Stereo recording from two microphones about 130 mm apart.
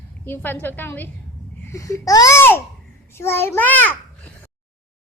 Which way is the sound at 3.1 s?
20° left (ahead or behind).